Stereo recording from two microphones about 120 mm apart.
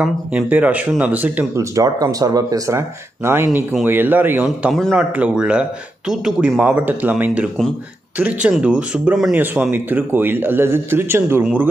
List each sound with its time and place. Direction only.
0.0 s speech: 10° right (ahead or behind)
1.6 s speech: 30° right (ahead or behind)
3.3 s speech: 20° right (ahead or behind)